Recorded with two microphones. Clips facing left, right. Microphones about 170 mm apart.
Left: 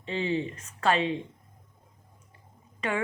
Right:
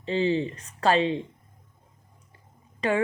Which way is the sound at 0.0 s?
30° right (ahead or behind).